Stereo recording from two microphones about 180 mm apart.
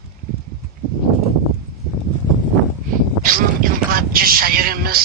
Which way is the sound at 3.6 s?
55° right (ahead or behind).